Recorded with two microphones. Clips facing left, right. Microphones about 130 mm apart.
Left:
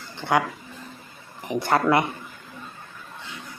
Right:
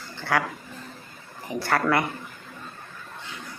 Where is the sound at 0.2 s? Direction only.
20° left (ahead or behind).